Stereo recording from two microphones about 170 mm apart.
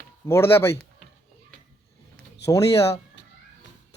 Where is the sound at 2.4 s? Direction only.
20° left (ahead or behind).